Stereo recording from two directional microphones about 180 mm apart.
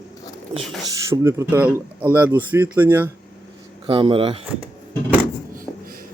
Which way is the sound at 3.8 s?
30° right (ahead or behind).